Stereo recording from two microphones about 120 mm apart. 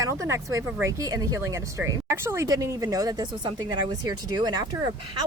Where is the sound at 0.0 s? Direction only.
25° right (ahead or behind).